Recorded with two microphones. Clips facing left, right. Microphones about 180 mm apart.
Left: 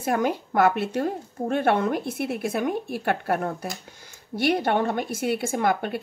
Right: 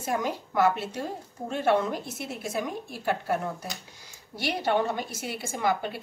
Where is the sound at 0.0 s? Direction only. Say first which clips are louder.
Left 5 dB; 60° left (ahead or behind).